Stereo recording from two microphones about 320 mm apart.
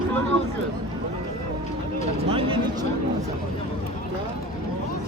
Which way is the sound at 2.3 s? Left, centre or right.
Centre.